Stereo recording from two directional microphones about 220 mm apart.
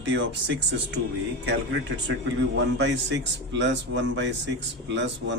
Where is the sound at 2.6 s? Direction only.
50° right (ahead or behind).